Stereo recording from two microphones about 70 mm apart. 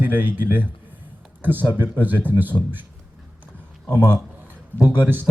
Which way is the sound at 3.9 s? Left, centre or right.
Right.